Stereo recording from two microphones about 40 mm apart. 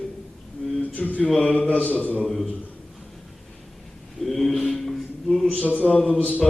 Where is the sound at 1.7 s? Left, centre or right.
Left.